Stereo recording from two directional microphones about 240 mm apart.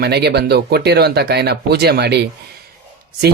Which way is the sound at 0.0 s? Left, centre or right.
Right.